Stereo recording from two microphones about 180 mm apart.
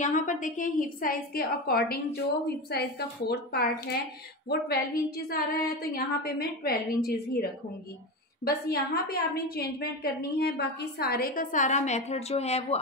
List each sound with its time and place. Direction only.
0.0 s a woman's voice: 45° left (ahead or behind)
8.5 s a woman's voice: 60° left (ahead or behind); by 12.7 s 35° left (ahead or behind)